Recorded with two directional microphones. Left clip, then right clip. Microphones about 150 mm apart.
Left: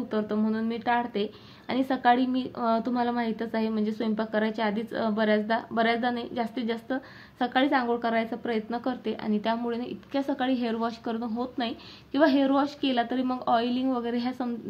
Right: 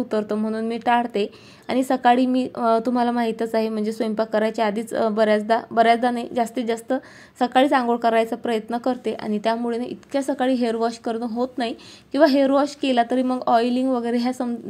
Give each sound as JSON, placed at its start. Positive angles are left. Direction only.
{"t": 0.1, "sound": "a woman's voice", "side_deg": -40}